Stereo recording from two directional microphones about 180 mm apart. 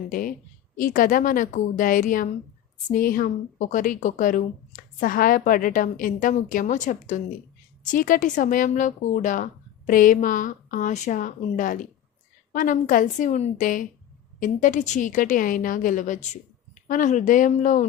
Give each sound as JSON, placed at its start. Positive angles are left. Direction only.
{"t": 0.1, "sound": "a woman's voice", "side_deg": 50}